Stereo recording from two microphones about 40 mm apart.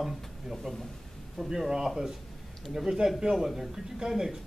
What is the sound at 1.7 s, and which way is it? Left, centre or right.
A man's voice, centre.